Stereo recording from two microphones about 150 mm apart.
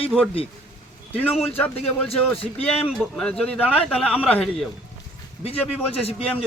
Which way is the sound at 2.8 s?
Centre (ahead or behind).